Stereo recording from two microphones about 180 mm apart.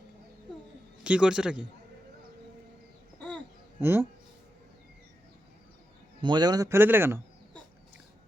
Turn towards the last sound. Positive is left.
turn(degrees=-10)  # may be behind; listen again after turning